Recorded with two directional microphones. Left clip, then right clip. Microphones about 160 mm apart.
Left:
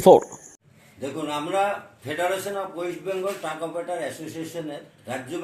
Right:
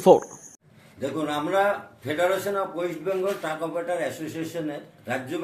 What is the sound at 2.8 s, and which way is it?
A man's voice, 5° right (ahead or behind).